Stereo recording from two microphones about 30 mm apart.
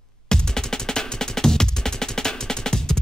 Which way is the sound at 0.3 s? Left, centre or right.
Centre.